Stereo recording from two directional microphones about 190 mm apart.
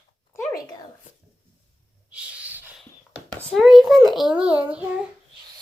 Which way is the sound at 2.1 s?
5° right (ahead or behind).